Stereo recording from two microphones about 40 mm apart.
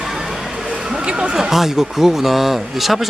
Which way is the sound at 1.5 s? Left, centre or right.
Centre.